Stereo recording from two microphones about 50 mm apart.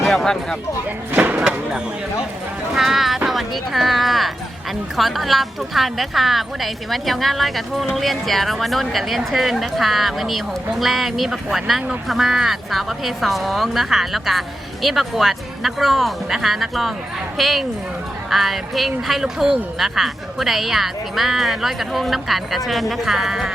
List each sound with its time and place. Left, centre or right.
0.0 s music: centre
1.1 s a sound: right
1.4 s speech: centre
2.7 s speech: centre